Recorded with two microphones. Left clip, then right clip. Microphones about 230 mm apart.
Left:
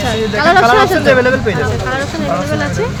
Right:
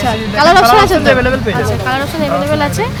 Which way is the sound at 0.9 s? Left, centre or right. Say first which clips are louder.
Even; centre.